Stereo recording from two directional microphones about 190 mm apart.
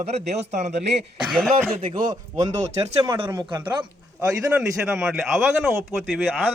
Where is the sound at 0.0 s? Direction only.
35° right (ahead or behind).